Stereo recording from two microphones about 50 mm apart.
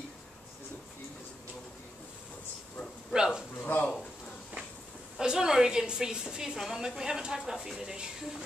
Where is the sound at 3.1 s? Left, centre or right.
Centre.